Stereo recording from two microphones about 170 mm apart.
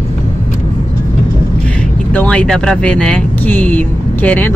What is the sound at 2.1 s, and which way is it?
Speech, 5° left (ahead or behind).